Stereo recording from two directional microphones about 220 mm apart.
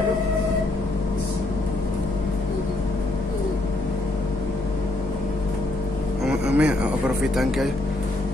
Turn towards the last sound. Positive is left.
turn(degrees=0)  # may be behind; listen again after turning